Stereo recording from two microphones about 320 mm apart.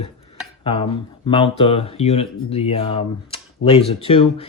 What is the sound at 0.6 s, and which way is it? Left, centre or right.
Speech, centre.